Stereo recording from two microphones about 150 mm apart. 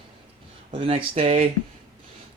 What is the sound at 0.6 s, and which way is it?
Speech, 45° right (ahead or behind).